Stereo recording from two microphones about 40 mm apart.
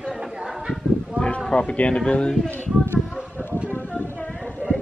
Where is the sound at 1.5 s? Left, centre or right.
Left.